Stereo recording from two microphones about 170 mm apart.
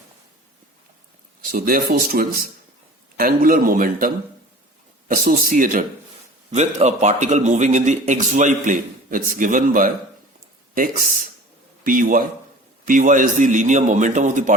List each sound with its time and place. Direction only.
1.5 s a man's voice: 55° right (ahead or behind)